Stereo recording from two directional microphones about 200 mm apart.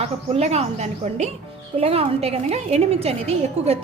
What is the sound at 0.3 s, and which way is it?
A woman's voice, 35° right (ahead or behind).